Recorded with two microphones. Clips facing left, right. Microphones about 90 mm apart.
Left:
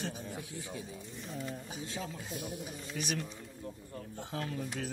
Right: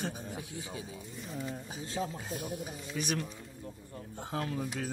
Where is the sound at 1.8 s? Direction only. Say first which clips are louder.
Right 4 dB; 40° right (ahead or behind).